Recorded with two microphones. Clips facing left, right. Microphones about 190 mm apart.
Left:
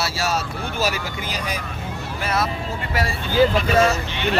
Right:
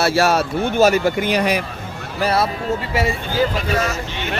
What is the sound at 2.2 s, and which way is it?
Speech, 35° right (ahead or behind).